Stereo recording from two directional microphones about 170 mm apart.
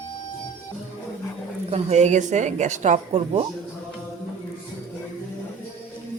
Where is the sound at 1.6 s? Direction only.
40° right (ahead or behind).